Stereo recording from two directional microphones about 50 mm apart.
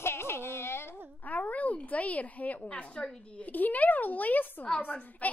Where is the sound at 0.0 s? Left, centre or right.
Left.